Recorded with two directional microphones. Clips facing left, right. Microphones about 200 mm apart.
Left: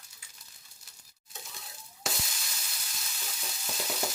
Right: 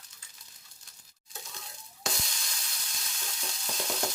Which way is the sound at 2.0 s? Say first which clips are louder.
Right 1 dB; 5° left (ahead or behind).